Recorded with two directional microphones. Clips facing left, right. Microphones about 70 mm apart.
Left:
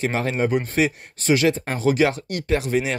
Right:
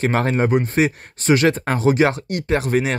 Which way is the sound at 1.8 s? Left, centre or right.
Right.